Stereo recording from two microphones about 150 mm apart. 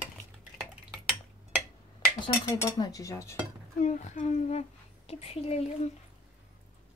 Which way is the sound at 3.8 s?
55° left (ahead or behind).